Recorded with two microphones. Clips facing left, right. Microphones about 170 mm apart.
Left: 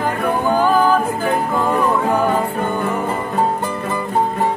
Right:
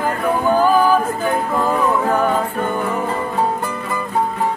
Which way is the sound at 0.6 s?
5° right (ahead or behind).